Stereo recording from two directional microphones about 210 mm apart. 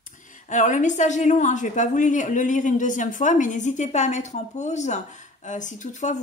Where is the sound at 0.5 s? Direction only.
35° left (ahead or behind).